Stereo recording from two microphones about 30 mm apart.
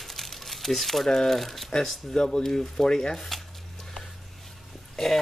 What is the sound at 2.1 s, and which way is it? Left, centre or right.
Speech, centre.